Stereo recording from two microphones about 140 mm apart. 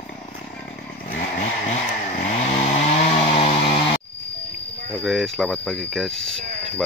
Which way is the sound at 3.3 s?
45° left (ahead or behind).